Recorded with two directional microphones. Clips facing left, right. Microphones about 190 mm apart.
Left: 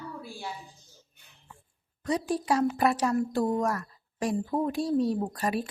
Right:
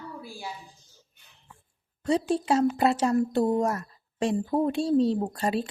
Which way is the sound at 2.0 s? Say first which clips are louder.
Right 3 dB; 25° right (ahead or behind).